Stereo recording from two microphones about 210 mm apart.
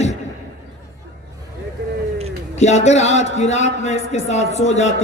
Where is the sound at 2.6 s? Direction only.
35° left (ahead or behind).